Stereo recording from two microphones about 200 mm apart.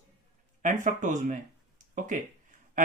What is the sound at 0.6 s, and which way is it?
Speech, 40° right (ahead or behind).